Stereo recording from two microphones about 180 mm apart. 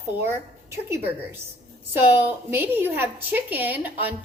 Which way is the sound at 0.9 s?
15° right (ahead or behind).